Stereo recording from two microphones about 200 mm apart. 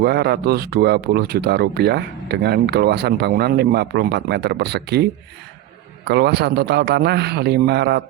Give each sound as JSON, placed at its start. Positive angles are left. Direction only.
{"t": 0.0, "sound": "speech", "side_deg": -55}
{"t": 6.1, "sound": "a man's voice", "side_deg": -55}